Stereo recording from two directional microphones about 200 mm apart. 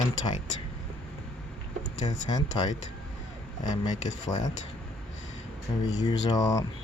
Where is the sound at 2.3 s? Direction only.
20° left (ahead or behind).